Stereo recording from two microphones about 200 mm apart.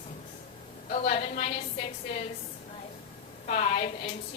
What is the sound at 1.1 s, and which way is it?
Speech, 30° left (ahead or behind).